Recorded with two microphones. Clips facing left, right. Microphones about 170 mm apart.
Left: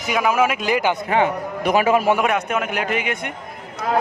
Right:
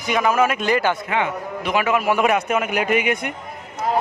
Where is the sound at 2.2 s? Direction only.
5° right (ahead or behind).